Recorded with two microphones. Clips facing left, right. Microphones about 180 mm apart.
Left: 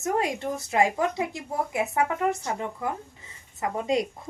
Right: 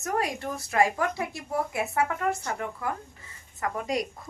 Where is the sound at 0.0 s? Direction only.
25° left (ahead or behind).